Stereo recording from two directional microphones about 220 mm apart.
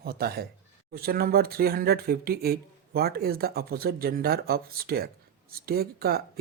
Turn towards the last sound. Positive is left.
turn(degrees=-45)  # may be behind; listen again after turning